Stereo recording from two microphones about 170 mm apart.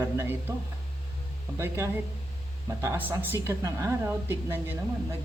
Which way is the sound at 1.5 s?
15° right (ahead or behind).